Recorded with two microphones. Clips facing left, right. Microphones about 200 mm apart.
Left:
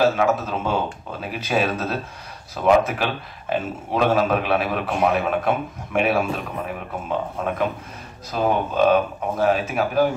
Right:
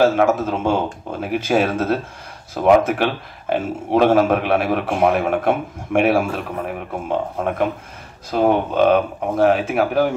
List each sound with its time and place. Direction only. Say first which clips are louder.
0.0 s a man's voice: right 4 dB; 50° right (ahead or behind)